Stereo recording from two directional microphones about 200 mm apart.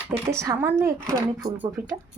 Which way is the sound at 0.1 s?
10° right (ahead or behind).